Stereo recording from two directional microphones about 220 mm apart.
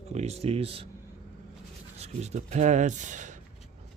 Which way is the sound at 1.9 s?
30° right (ahead or behind).